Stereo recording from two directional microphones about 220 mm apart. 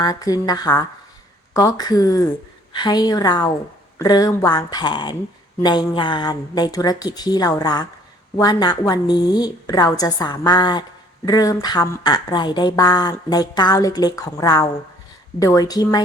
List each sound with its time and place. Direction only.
0.0 s speech: 15° left (ahead or behind)